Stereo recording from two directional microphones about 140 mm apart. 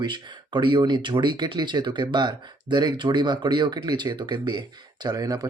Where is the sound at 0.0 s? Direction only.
35° right (ahead or behind).